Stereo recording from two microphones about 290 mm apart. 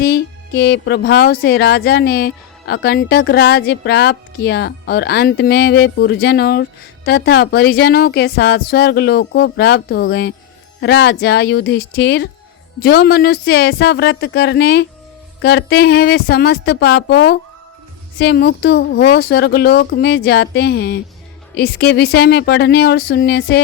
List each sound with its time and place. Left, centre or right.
0.0 s speech: left